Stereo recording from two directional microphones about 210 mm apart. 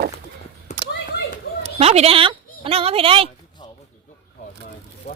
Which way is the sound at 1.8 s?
30° right (ahead or behind).